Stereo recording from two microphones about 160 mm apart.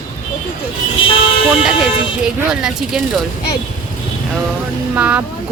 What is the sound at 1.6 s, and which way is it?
Speech, centre (ahead or behind).